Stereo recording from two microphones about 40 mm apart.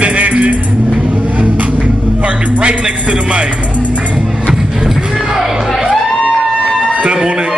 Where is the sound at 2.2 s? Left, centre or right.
Right.